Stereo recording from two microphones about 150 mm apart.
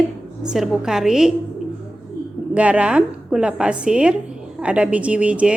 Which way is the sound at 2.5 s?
10° right (ahead or behind).